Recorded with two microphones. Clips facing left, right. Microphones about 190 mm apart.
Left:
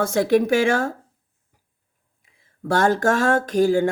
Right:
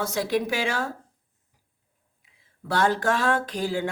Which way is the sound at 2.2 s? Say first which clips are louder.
Left 10 dB; 45° left (ahead or behind).